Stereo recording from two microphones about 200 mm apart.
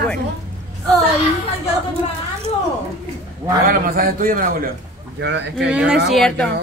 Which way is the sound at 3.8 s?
45° right (ahead or behind).